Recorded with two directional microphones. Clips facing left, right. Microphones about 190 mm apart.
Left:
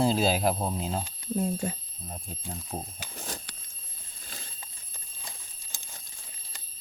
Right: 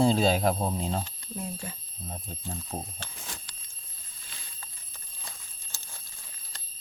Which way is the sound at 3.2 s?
40° left (ahead or behind).